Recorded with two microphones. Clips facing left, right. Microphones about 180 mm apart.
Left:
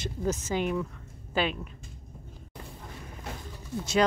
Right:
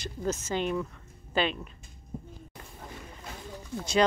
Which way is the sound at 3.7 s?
5° left (ahead or behind).